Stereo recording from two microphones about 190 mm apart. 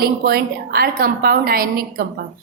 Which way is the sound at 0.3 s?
55° right (ahead or behind).